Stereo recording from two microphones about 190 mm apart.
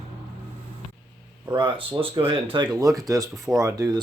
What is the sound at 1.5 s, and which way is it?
Speech, 25° right (ahead or behind).